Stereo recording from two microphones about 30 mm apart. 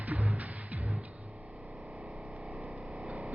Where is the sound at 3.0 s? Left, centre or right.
Right.